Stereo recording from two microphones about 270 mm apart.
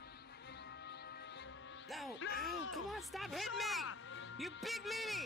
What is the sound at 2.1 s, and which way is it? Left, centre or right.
Speech, left.